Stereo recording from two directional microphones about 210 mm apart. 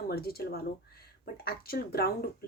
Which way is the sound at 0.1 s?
45° left (ahead or behind).